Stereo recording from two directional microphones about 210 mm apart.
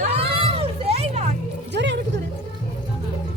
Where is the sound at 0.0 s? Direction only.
30° right (ahead or behind).